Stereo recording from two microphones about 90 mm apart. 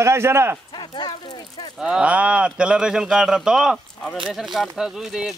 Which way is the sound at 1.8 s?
10° right (ahead or behind).